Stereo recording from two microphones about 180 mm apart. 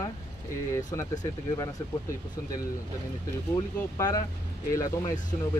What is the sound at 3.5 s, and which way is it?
Speech, 20° left (ahead or behind).